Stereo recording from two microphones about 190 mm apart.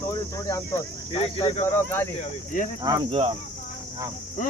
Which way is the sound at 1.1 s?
30° left (ahead or behind).